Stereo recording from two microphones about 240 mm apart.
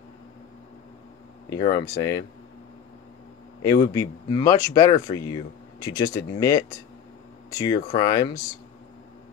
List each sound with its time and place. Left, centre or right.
1.5 s speech: centre
3.6 s speech: centre